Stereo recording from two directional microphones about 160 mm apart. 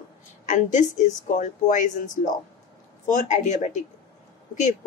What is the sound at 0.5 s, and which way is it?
Speech, 50° left (ahead or behind).